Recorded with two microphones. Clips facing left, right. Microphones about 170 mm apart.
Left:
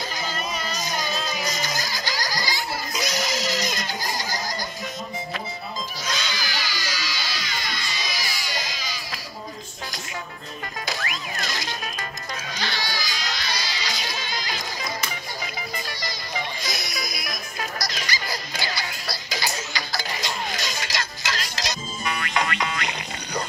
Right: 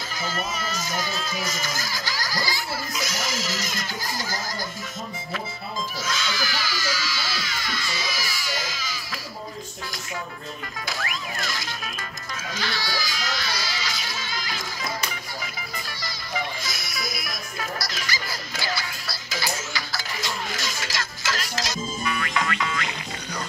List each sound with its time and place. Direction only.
0.2 s a sound: 20° left (ahead or behind)
6.0 s music: 20° left (ahead or behind)
11.4 s music: 20° left (ahead or behind)
16.6 s music: 20° left (ahead or behind)